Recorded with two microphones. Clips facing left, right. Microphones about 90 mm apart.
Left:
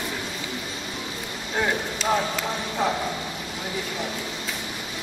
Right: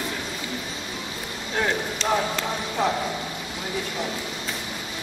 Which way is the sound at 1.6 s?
5° left (ahead or behind).